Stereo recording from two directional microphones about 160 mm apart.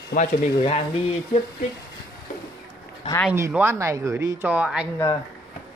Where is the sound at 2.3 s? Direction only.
60° left (ahead or behind).